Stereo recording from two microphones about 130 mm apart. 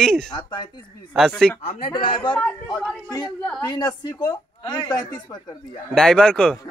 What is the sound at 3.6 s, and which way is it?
A woman's voice, 30° left (ahead or behind).